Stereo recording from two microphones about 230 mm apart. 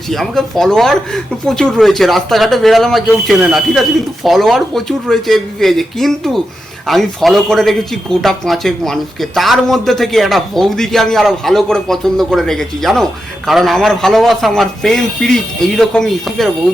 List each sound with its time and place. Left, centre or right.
0.1 s speech: centre